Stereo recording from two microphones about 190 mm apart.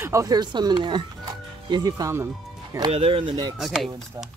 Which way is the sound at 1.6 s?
20° right (ahead or behind).